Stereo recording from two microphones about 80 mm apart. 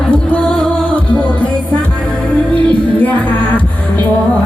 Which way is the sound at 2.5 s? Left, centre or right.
Centre.